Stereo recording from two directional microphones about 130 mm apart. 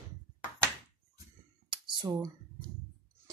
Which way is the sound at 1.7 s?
40° right (ahead or behind).